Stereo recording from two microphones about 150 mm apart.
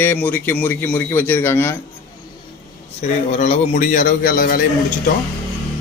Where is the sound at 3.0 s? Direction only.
50° left (ahead or behind); by 4.6 s 70° left (ahead or behind).